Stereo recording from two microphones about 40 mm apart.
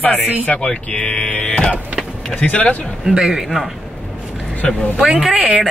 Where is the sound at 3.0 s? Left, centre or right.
Centre.